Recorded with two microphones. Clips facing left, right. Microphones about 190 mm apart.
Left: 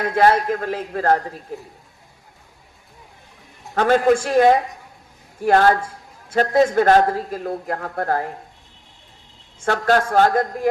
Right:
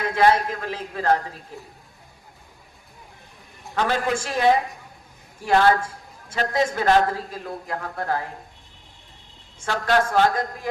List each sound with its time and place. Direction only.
0.0 s a man's voice: 45° left (ahead or behind)
3.8 s a man's voice: 45° left (ahead or behind)
9.6 s a man's voice: 50° left (ahead or behind)